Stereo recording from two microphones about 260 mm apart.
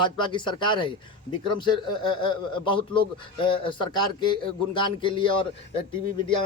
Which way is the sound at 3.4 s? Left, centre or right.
Centre.